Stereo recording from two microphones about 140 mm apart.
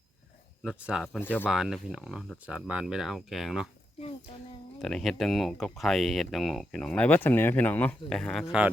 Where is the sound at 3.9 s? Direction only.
45° left (ahead or behind).